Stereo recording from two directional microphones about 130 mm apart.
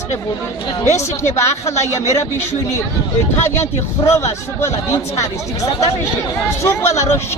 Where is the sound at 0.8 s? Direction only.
20° left (ahead or behind).